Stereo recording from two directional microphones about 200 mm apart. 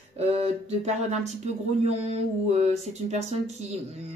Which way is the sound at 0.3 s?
30° right (ahead or behind).